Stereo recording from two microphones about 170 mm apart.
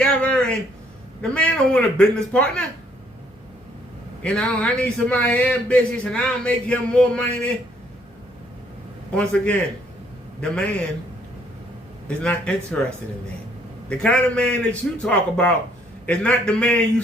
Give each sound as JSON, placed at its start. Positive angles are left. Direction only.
{"t": 0.0, "sound": "a sound", "side_deg": 10}
{"t": 1.2, "sound": "speech", "side_deg": 5}
{"t": 4.2, "sound": "speech", "side_deg": 5}
{"t": 9.1, "sound": "speech", "side_deg": 5}
{"t": 12.0, "sound": "speech", "side_deg": 5}